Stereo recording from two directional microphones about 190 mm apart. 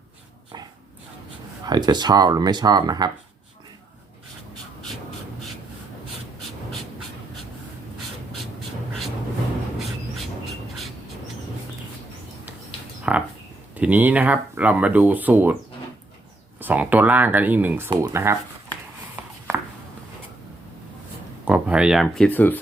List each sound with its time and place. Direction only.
1.6 s speech: 20° right (ahead or behind)
9.7 s a sound: centre (ahead or behind)
13.1 s a sound: 5° right (ahead or behind)
13.7 s speech: 10° right (ahead or behind)
16.6 s speech: 10° right (ahead or behind)
21.4 s speech: 5° right (ahead or behind); by 22.6 s 10° left (ahead or behind)